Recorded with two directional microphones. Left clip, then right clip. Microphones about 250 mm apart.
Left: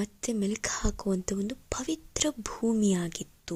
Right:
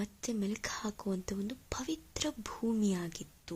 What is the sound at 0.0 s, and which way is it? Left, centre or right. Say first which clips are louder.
Speech: left 6 dB; left.